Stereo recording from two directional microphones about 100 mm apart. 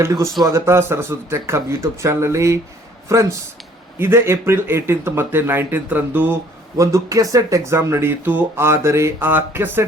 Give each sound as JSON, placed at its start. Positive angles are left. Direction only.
{"t": 0.0, "sound": "speech", "side_deg": -30}
{"t": 6.7, "sound": "speech", "side_deg": -30}